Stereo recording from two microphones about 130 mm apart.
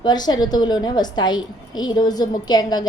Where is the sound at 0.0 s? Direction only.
30° left (ahead or behind).